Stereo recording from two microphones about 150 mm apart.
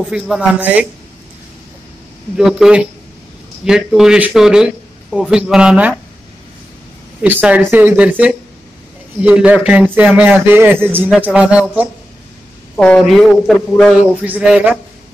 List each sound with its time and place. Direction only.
0.0 s speech: 5° right (ahead or behind)
2.3 s a man's voice: 5° right (ahead or behind)
7.2 s speech: 10° right (ahead or behind)
12.7 s a man's voice: 5° left (ahead or behind)